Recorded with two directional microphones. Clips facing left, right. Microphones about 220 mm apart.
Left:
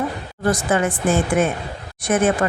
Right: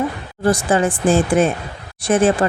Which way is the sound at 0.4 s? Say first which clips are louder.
Right 3 dB; 30° right (ahead or behind).